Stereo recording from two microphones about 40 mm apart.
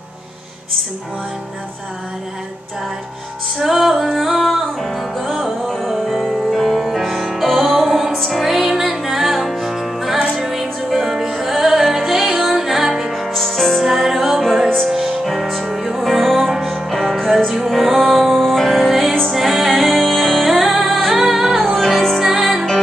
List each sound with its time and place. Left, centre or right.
3.6 s female singing: centre
4.2 s music: centre
14.9 s music: centre
15.2 s music: centre
21.1 s music: centre